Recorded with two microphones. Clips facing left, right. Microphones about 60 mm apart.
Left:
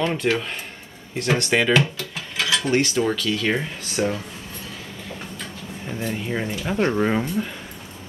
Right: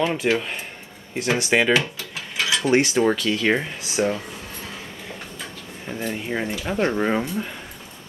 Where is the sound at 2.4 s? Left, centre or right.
Centre.